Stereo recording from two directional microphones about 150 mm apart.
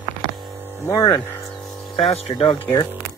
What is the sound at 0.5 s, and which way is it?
Hum, 15° right (ahead or behind).